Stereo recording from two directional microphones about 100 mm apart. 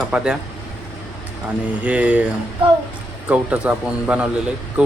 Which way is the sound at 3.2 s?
15° right (ahead or behind).